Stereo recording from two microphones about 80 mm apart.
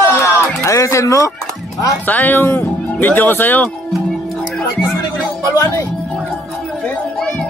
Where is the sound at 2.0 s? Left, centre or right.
Left.